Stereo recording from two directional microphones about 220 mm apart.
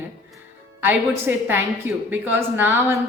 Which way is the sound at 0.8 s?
10° right (ahead or behind).